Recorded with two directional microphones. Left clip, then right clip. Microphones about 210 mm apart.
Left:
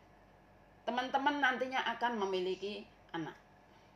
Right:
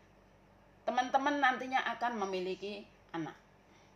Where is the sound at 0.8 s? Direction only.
25° right (ahead or behind).